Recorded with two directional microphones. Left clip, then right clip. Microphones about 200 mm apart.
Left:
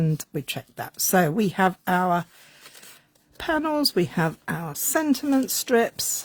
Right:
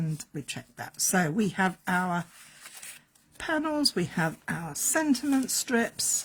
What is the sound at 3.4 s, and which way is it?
Speech, 55° left (ahead or behind).